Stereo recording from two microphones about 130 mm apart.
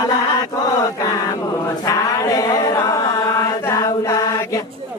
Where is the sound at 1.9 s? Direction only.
30° left (ahead or behind).